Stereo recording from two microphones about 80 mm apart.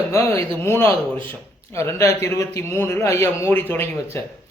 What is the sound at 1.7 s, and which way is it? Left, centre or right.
A man's voice, left.